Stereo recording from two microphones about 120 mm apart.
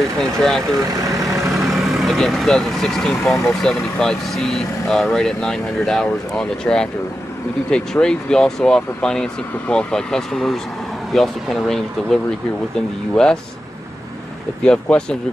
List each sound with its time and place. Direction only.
0.2 s speech: 5° left (ahead or behind)
0.8 s speech: 30° right (ahead or behind)
1.5 s speech: centre (ahead or behind)
13.1 s speech: 5° left (ahead or behind)
14.6 s speech: 5° left (ahead or behind)